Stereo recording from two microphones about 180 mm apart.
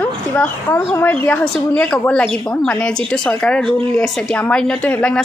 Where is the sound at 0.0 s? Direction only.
10° left (ahead or behind).